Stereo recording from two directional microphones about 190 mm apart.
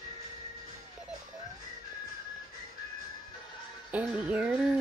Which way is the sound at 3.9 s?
5° right (ahead or behind).